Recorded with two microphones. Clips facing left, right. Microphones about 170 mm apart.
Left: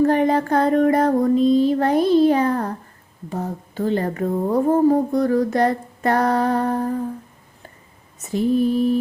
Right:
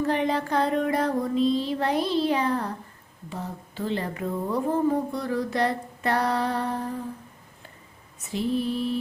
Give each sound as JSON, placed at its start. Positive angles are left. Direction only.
{"t": 0.0, "sound": "speech", "side_deg": 45}
{"t": 8.2, "sound": "speech", "side_deg": 45}